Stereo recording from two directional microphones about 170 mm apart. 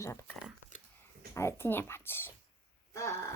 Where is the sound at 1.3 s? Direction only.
15° left (ahead or behind).